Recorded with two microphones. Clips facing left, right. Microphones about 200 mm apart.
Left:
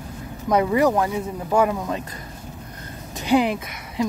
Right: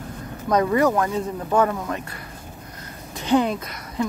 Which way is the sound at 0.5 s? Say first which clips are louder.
Even; 15° left (ahead or behind).